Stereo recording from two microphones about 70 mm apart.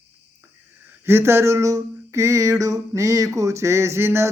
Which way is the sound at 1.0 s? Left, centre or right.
Right.